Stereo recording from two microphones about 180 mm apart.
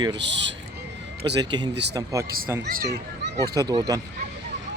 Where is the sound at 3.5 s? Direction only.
20° right (ahead or behind).